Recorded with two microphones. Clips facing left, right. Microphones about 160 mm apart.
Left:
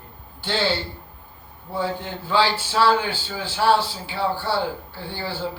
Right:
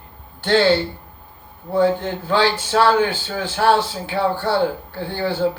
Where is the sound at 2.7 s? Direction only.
55° right (ahead or behind).